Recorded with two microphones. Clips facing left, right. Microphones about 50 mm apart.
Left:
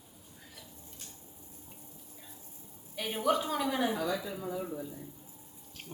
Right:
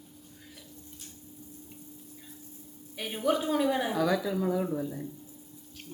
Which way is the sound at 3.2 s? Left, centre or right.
Centre.